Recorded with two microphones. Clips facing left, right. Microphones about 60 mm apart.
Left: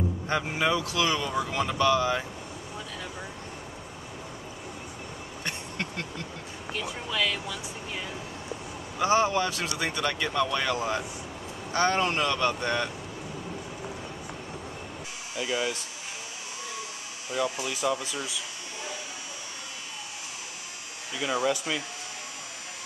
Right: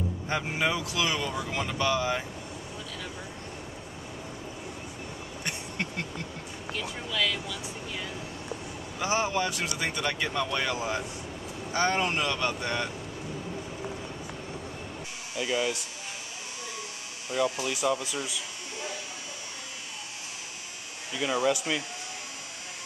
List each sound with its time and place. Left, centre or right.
0.3 s speech: centre
5.4 s bee: centre
7.1 s speech: left
7.4 s vehicle: left
9.0 s speech: centre
15.3 s speech: centre
17.3 s speech: centre
21.1 s speech: centre